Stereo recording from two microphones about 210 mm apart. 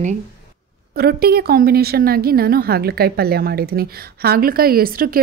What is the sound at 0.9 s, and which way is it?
A woman's voice, 45° right (ahead or behind).